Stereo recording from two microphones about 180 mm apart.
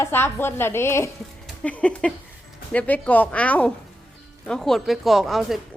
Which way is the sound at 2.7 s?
10° left (ahead or behind).